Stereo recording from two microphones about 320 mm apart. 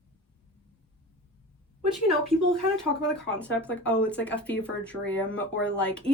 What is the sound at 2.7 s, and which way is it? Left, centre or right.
Speech, centre.